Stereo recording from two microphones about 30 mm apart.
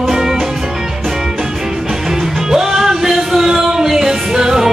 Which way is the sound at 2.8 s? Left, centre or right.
Centre.